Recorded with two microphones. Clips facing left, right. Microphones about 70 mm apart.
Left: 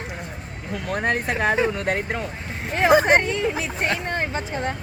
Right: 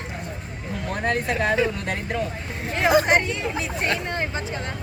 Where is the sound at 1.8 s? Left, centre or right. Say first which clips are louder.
Left 3 dB; left.